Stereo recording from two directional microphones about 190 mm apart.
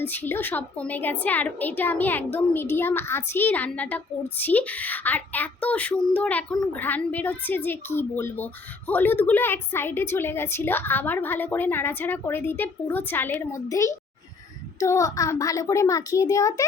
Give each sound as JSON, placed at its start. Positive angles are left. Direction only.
{"t": 0.0, "sound": "a woman's voice", "side_deg": 10}